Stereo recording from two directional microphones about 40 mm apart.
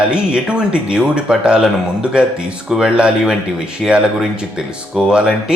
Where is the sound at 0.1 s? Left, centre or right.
Right.